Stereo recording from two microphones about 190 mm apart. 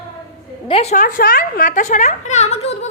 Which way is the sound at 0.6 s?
30° left (ahead or behind).